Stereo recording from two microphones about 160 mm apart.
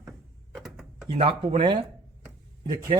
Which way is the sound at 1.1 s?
35° right (ahead or behind).